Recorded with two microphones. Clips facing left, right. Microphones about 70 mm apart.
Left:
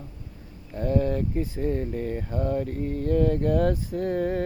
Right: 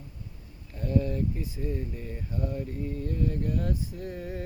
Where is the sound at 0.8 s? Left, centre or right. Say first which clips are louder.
Left 4 dB; left.